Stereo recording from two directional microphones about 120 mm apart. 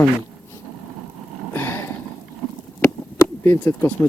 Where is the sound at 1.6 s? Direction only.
20° left (ahead or behind).